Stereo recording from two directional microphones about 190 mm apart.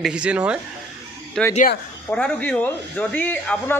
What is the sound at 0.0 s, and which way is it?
A man's voice, 5° right (ahead or behind).